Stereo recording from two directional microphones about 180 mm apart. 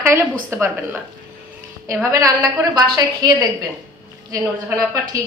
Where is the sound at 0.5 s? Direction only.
15° right (ahead or behind).